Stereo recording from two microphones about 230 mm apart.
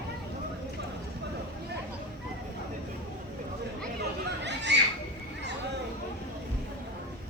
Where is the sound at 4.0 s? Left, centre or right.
Right.